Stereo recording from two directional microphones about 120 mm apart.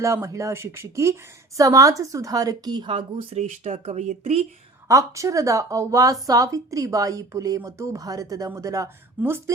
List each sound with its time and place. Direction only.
0.0 s a woman's voice: 25° right (ahead or behind); by 3.3 s 45° right (ahead or behind)
3.3 s speech: 70° right (ahead or behind)
4.9 s a woman's voice: 25° right (ahead or behind)